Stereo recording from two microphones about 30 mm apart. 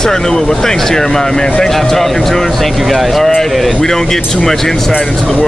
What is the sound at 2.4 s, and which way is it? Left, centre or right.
Music, centre.